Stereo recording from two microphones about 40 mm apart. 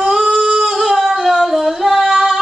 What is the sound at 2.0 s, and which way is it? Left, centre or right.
Music, centre.